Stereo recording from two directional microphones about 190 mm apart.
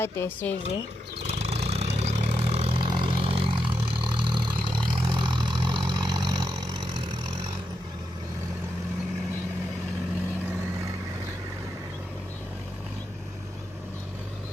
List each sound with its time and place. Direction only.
0.0 s speech: 10° left (ahead or behind)
1.3 s a sound: 35° right (ahead or behind)
2.0 s vehicle: 35° right (ahead or behind)